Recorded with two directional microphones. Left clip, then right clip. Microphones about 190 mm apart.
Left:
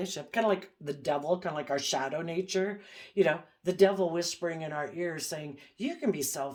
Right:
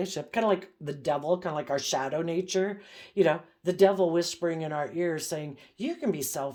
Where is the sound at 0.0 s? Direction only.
45° right (ahead or behind).